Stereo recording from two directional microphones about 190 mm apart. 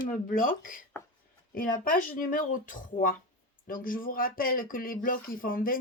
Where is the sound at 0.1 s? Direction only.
45° left (ahead or behind).